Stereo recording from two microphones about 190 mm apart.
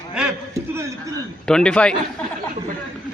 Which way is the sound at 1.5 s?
5° left (ahead or behind).